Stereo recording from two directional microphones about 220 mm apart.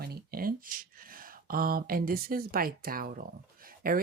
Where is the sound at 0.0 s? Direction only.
45° right (ahead or behind).